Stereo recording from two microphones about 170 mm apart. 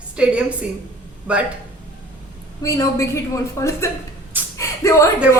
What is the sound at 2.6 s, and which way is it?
A woman's voice, 20° left (ahead or behind).